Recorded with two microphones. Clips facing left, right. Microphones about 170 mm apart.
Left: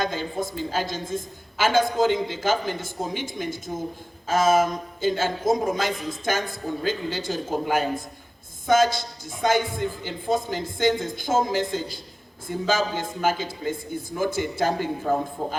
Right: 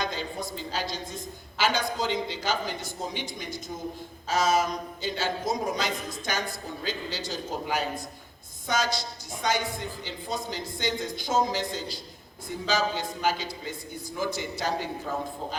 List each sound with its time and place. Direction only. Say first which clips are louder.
0.4 s a man's voice: left 5 dB; 50° left (ahead or behind)